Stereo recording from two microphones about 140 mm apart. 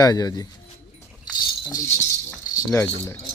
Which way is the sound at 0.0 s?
25° left (ahead or behind).